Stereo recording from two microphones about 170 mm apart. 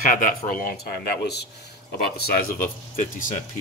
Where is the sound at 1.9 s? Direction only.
65° left (ahead or behind).